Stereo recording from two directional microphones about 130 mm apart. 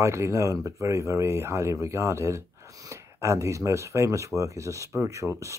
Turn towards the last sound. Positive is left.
turn(degrees=-25)  # may be behind; listen again after turning